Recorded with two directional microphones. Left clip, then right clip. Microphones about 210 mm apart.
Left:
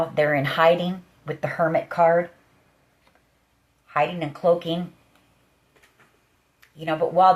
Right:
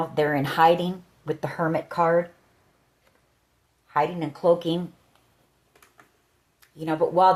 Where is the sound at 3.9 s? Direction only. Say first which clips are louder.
Left 1 dB; 45° right (ahead or behind).